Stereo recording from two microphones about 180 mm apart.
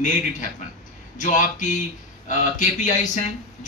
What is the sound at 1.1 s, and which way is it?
Speech, 45° left (ahead or behind).